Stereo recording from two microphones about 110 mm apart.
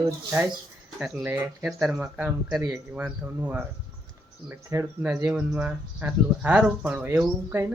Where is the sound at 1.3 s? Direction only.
15° right (ahead or behind).